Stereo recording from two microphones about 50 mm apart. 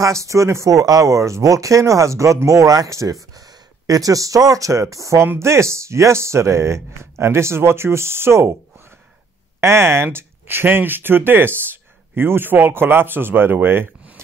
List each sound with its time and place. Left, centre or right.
0.0 s speech: right
4.3 s speech: right
4.6 s speech: right
5.4 s speech: right
9.6 s speech: right